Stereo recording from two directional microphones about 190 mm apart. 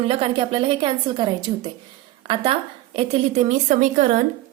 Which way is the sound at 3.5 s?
40° right (ahead or behind).